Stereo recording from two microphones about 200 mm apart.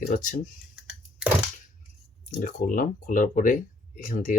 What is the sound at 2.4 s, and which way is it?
Speech, 40° left (ahead or behind).